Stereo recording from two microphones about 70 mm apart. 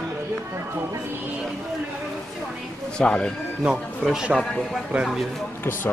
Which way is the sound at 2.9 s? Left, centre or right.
Centre.